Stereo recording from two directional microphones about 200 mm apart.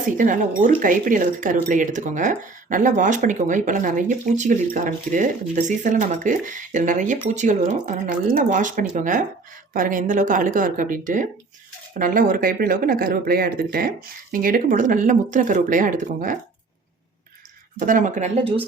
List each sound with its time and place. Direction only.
0.2 s speech: 40° right (ahead or behind)
17.7 s speech: 40° right (ahead or behind)